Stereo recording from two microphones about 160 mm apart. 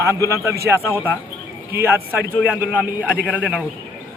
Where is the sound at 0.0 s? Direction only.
20° right (ahead or behind).